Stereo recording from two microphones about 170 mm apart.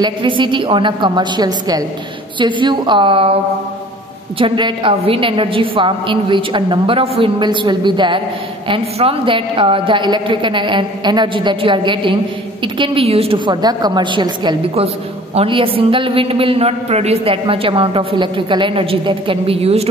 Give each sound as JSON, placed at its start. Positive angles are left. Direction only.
{"t": 0.0, "sound": "a woman's voice", "side_deg": -30}
{"t": 4.4, "sound": "a woman's voice", "side_deg": -30}